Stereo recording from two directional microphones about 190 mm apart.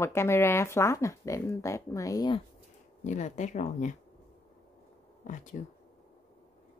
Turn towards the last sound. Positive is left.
turn(degrees=40)  # may be behind; listen again after turning